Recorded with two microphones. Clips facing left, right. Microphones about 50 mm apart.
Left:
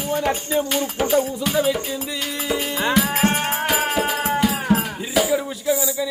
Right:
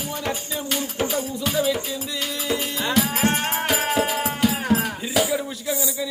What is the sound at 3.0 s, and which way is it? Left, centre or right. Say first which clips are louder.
Music: right 1 dB; left.